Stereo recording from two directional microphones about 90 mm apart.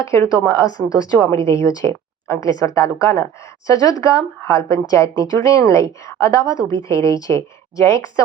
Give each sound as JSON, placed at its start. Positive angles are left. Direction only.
{"t": 0.0, "sound": "a woman's voice", "side_deg": 35}